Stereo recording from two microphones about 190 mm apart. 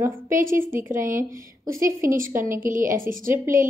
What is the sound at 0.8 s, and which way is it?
A woman's voice, 15° right (ahead or behind).